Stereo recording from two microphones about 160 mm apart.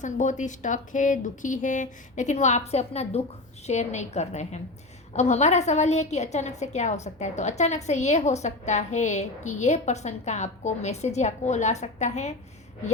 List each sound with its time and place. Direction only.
0.0 s a woman's voice: 50° left (ahead or behind)